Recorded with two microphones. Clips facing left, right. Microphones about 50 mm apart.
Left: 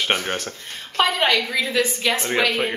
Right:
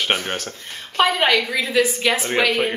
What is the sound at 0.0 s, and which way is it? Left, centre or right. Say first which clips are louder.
A woman's voice: even; centre.